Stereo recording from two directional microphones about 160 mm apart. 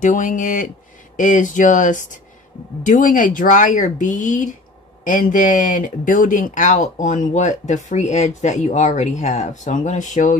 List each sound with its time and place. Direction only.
0.0 s speech: 50° left (ahead or behind)